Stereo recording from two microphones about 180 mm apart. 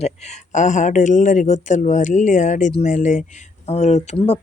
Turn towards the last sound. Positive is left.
turn(degrees=35)  # may be behind; listen again after turning